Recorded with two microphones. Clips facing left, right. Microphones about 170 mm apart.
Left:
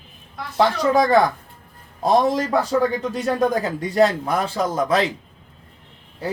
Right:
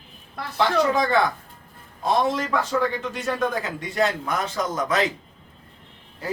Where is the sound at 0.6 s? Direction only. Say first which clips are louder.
Left 3 dB; 35° left (ahead or behind).